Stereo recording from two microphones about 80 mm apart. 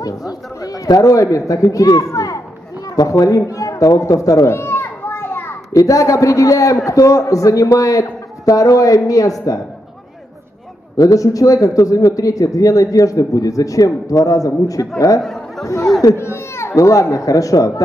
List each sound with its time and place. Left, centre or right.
0.0 s a man's voice: left
4.6 s children playing: left
5.7 s a man's voice: left
11.0 s a man's voice: left
15.2 s chatter: centre
15.6 s speech: left